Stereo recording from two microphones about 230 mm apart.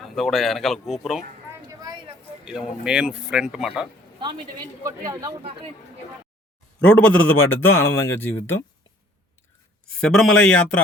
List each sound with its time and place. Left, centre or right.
0.0 s speech: centre
1.8 s a sound: centre
2.4 s speech: centre
4.8 s a man's voice: centre
6.7 s speech: centre
9.8 s speech: centre